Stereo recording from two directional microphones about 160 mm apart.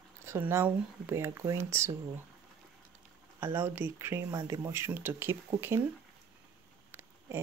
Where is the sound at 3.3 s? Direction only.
15° right (ahead or behind).